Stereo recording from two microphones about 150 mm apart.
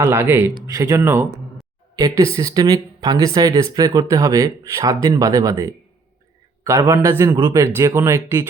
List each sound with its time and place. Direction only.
0.0 s speech: 15° right (ahead or behind)
7.3 s speech: 30° right (ahead or behind)
7.5 s speech: 20° right (ahead or behind)